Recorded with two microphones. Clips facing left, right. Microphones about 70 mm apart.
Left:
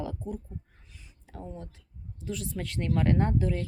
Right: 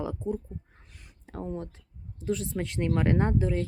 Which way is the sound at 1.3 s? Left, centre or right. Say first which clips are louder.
Right 6 dB; right.